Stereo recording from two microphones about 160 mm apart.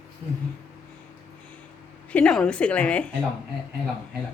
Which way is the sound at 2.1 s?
5° left (ahead or behind).